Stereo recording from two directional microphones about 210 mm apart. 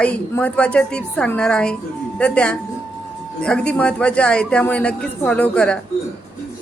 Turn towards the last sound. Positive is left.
turn(degrees=5)  # may be behind; listen again after turning